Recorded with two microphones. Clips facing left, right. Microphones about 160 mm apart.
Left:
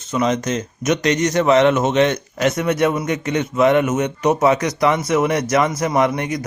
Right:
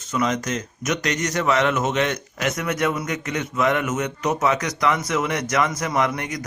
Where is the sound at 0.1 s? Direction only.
25° left (ahead or behind).